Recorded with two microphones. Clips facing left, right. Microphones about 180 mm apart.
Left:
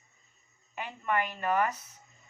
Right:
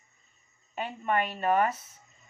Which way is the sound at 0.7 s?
30° right (ahead or behind).